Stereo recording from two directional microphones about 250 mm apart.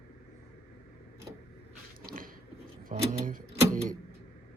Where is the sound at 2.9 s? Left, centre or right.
Right.